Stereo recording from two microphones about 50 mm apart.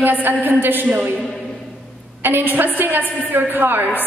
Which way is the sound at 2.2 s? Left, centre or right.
Right.